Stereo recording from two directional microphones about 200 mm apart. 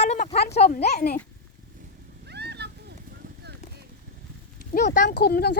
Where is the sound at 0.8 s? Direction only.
55° left (ahead or behind).